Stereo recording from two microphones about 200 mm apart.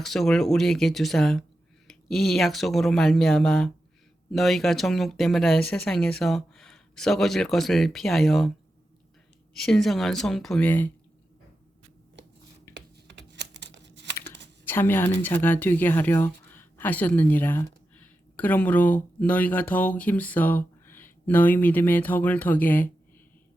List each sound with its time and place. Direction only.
0.0 s speech: centre (ahead or behind)
9.6 s speech: centre (ahead or behind)
12.7 s computer keyboard: 60° right (ahead or behind)
14.7 s speech: 10° left (ahead or behind)